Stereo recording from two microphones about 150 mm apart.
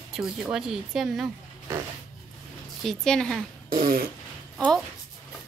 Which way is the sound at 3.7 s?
75° right (ahead or behind).